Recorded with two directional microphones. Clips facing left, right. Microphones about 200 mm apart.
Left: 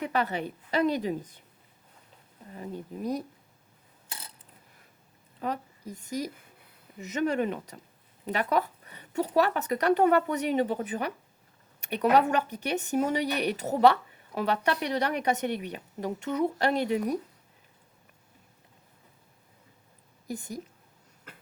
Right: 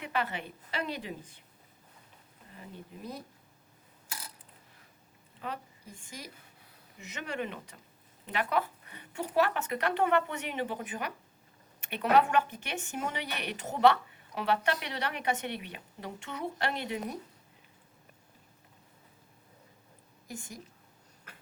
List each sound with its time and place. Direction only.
0.0 s a woman's voice: 40° left (ahead or behind)
2.6 s a woman's voice: 40° left (ahead or behind)
5.4 s a woman's voice: 40° left (ahead or behind)
20.2 s a woman's voice: 35° left (ahead or behind)